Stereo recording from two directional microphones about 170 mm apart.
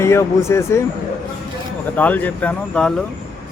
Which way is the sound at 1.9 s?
10° left (ahead or behind).